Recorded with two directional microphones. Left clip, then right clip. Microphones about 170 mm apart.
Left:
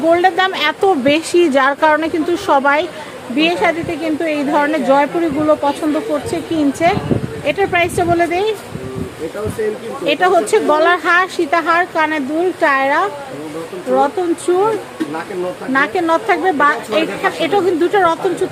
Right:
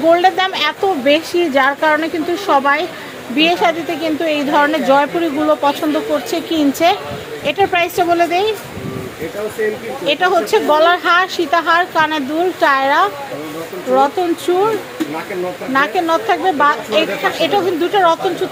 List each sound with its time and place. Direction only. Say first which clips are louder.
0.1 s speech: even; 10° left (ahead or behind)
1.0 s speech: left 1 dB; 35° left (ahead or behind)
3.3 s a woman's voice: right 1 dB; 10° left (ahead or behind)
10.1 s speech: left 1 dB; 20° left (ahead or behind)
15.7 s speech: even; 20° left (ahead or behind)